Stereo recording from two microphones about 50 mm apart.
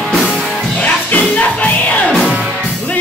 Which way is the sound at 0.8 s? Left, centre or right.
Left.